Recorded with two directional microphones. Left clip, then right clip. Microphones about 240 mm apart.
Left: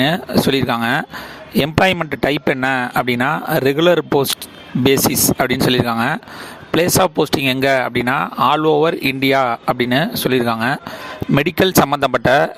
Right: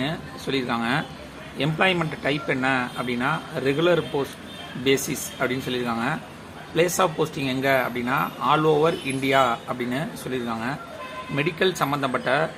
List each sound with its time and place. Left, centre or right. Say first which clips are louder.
0.0 s speech: left 14 dB; left
5.4 s speech: left 8 dB; left